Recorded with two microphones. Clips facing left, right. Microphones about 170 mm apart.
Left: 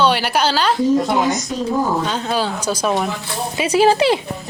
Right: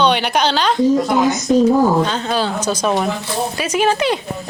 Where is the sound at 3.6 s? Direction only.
30° left (ahead or behind).